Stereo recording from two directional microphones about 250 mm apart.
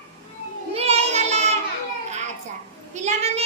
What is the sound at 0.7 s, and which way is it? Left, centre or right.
Child singing, right.